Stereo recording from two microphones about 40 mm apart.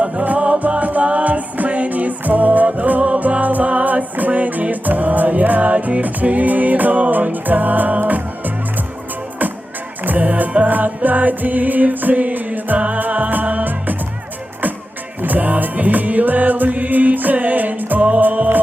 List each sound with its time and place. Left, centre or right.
0.0 s music: right
10.0 s music: right
15.2 s music: right